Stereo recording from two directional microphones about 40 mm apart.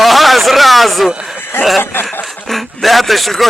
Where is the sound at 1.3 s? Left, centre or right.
Left.